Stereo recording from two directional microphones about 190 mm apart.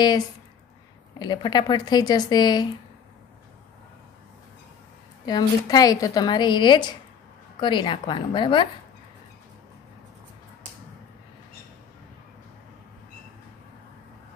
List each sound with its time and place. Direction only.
1.2 s a woman's voice: 25° left (ahead or behind)
5.2 s a woman's voice: 20° left (ahead or behind)